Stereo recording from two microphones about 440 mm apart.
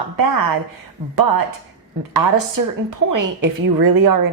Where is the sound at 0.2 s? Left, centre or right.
Right.